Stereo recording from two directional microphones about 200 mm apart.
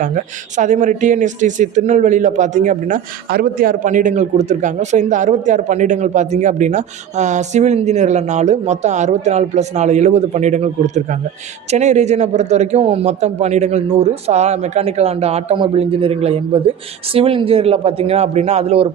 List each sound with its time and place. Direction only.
0.5 s speech: 40° right (ahead or behind)